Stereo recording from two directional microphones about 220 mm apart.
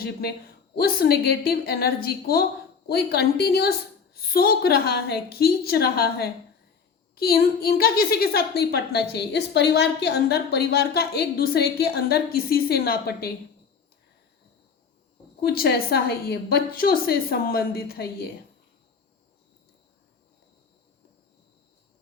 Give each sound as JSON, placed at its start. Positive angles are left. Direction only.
{"t": 0.0, "sound": "a woman's voice", "side_deg": 45}
{"t": 15.4, "sound": "a woman's voice", "side_deg": 45}